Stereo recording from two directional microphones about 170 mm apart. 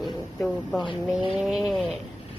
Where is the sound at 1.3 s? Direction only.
Centre (ahead or behind).